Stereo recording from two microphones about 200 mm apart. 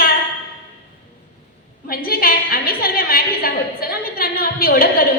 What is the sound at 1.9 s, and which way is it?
A woman's voice, 45° left (ahead or behind).